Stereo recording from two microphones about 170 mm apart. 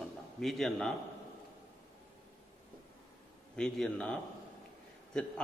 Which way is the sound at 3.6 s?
5° left (ahead or behind).